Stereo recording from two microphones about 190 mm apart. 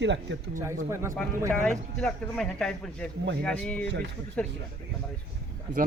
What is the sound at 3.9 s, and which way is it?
Speech, 60° right (ahead or behind).